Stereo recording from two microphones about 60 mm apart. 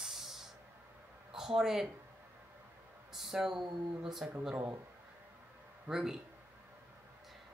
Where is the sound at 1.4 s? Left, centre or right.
Centre.